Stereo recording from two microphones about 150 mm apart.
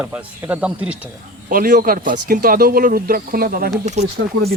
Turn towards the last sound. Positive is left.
turn(degrees=-50)  # may be behind; listen again after turning